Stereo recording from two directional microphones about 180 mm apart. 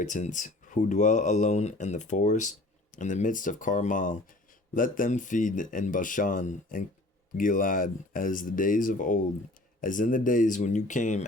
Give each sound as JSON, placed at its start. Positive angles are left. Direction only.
{"t": 0.0, "sound": "speech", "side_deg": 45}